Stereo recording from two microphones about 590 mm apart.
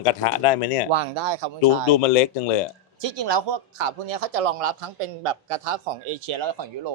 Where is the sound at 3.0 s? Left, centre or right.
Right.